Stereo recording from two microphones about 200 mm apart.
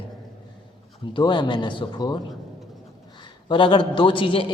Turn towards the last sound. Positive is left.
turn(degrees=25)  # may be behind; listen again after turning